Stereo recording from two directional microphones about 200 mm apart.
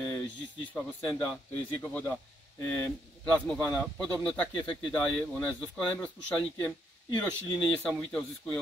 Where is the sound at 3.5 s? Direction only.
15° left (ahead or behind).